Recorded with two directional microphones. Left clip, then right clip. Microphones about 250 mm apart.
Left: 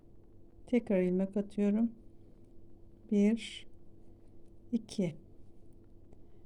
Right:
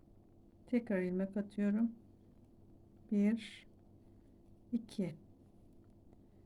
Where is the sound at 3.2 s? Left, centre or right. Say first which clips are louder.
Left 6 dB; left.